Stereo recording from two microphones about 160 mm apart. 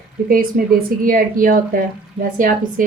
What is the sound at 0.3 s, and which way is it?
Speech, 60° right (ahead or behind).